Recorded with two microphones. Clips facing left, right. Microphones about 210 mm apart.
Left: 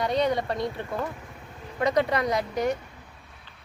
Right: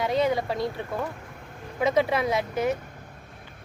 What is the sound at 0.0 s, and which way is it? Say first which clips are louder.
Speech: right 1 dB; 5° right (ahead or behind).